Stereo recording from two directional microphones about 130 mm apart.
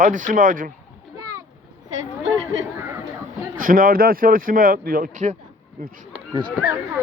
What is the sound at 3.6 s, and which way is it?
Speech, 90° right.